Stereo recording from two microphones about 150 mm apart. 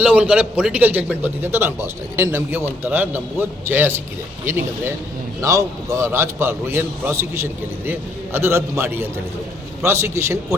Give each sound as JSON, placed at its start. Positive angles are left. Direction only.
{"t": 0.0, "sound": "a man's voice", "side_deg": -10}